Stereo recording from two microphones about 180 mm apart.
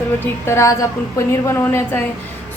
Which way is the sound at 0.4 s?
15° left (ahead or behind).